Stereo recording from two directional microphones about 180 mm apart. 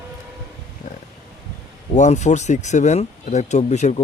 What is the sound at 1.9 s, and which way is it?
Speech, 40° left (ahead or behind).